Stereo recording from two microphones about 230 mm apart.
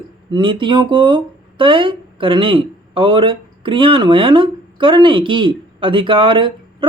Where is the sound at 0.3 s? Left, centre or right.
Centre.